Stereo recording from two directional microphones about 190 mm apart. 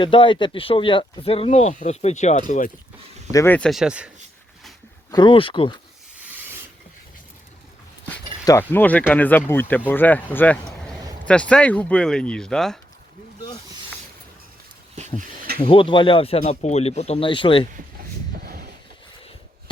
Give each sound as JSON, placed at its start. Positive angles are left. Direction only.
{"t": 0.0, "sound": "speech", "side_deg": 25}
{"t": 3.3, "sound": "speech", "side_deg": 10}
{"t": 5.1, "sound": "speech", "side_deg": 25}
{"t": 8.0, "sound": "speech", "side_deg": 10}
{"t": 15.6, "sound": "speech", "side_deg": 30}